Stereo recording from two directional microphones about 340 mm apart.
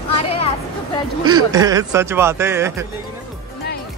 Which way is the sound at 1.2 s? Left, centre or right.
Centre.